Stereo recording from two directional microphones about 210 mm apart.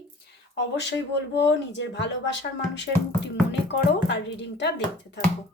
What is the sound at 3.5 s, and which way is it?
Speech, 55° left (ahead or behind).